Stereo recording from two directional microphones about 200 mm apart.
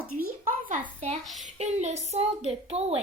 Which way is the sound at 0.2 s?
40° right (ahead or behind).